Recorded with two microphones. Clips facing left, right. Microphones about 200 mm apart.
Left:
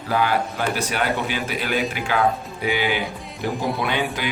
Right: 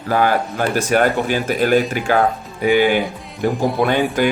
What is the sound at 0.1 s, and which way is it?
A man's voice, 45° right (ahead or behind).